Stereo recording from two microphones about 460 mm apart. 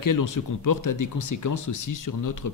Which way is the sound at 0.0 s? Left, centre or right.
Left.